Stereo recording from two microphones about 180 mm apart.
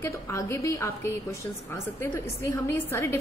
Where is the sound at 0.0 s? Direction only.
15° left (ahead or behind).